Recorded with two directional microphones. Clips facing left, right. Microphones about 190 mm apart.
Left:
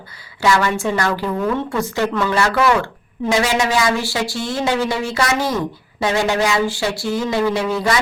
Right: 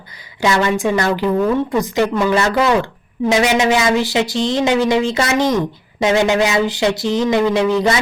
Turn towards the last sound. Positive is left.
turn(degrees=-20)  # may be behind; listen again after turning